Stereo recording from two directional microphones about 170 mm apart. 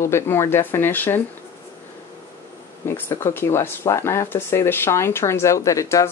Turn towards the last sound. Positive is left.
turn(degrees=20)  # may be behind; listen again after turning